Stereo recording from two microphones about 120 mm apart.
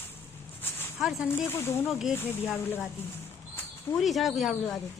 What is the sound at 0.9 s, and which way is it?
Speech, 5° right (ahead or behind).